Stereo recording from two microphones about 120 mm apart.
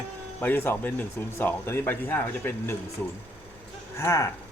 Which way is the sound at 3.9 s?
25° left (ahead or behind).